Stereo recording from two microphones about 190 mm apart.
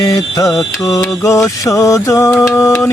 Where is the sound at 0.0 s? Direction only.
20° left (ahead or behind).